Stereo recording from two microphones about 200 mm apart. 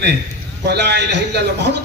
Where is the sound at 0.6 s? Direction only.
55° right (ahead or behind).